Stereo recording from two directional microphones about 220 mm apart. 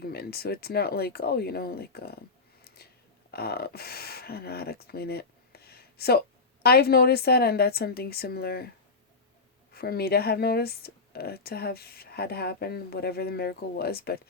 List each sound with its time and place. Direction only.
0.0 s speech: 45° left (ahead or behind)
2.6 s a sound: 45° left (ahead or behind)
3.3 s speech: 45° left (ahead or behind)
9.7 s speech: 45° left (ahead or behind)